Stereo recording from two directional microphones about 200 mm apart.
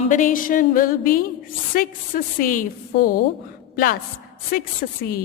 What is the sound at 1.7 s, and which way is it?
A woman's voice, 45° left (ahead or behind).